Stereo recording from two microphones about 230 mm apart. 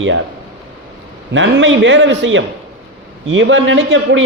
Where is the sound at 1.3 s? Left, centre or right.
Right.